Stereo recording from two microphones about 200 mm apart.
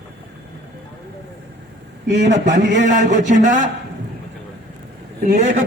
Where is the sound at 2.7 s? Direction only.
40° right (ahead or behind).